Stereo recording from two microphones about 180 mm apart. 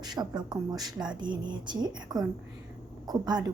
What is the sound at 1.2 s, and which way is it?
A woman's voice, 25° right (ahead or behind).